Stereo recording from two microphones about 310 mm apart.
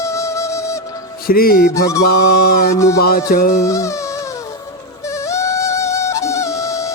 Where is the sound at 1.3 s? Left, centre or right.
Left.